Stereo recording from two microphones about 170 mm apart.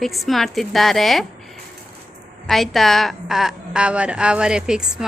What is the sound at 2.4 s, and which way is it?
A woman's voice, centre (ahead or behind).